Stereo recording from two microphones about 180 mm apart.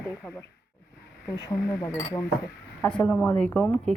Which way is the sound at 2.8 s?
5° left (ahead or behind).